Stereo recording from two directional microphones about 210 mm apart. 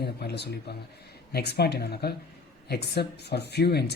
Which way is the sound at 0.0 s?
50° left (ahead or behind).